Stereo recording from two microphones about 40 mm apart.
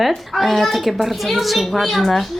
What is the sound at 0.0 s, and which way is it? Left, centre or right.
A woman's voice, centre.